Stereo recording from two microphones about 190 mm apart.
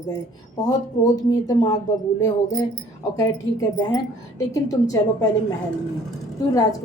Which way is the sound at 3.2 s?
20° left (ahead or behind).